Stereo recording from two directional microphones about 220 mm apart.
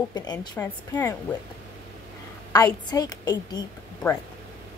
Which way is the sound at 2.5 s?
15° left (ahead or behind).